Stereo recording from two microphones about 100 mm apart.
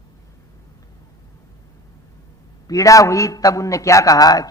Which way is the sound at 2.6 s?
35° left (ahead or behind).